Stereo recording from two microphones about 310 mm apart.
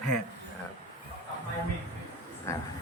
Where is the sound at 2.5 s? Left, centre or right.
Centre.